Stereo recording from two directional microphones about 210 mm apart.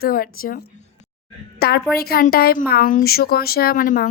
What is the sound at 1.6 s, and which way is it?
Speech, 50° left (ahead or behind).